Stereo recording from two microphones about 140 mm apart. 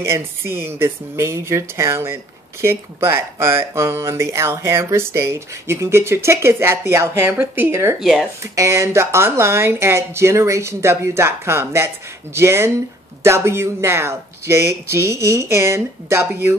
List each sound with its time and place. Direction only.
0.0 s speech: 15° right (ahead or behind)
8.0 s speech: centre (ahead or behind)
8.5 s speech: 20° right (ahead or behind)